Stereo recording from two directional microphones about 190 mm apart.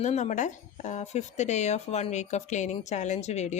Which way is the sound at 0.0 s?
40° left (ahead or behind).